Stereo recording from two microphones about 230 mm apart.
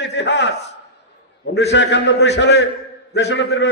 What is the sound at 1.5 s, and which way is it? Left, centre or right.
A man's voice, left.